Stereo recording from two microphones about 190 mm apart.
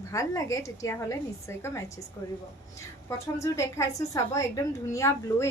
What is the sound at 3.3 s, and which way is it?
A woman's voice, 15° left (ahead or behind).